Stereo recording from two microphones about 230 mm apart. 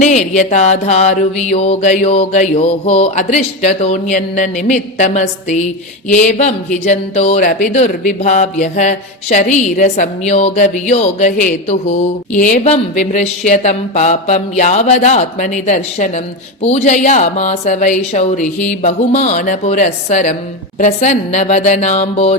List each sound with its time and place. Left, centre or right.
0.0 s mantra: left
6.1 s speech: left
20.7 s mantra: left